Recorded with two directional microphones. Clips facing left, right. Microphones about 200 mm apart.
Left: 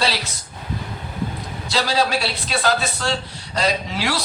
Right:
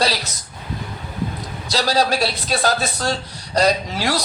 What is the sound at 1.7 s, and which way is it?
A man's voice, 40° right (ahead or behind).